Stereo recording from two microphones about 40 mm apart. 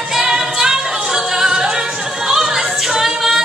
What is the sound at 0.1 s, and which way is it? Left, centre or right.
Music, centre.